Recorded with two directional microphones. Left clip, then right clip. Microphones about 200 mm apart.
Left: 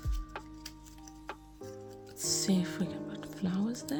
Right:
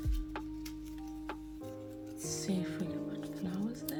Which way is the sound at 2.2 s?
45° left (ahead or behind).